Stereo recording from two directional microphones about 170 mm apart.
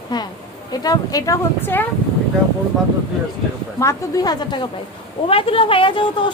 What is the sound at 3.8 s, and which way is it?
Speech, 20° left (ahead or behind).